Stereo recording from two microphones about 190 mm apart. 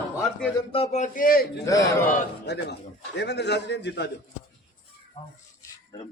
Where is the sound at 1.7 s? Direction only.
15° left (ahead or behind).